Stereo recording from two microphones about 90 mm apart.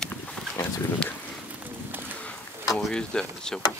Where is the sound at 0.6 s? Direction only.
35° left (ahead or behind).